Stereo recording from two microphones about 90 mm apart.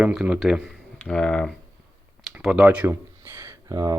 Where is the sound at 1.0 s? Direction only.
10° left (ahead or behind).